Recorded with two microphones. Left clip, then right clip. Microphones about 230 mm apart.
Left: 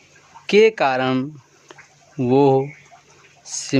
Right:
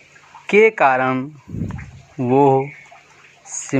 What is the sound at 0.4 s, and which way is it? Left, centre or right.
Speech, left.